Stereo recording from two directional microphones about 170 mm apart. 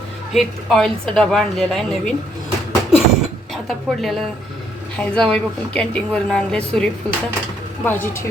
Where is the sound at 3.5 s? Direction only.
Centre (ahead or behind).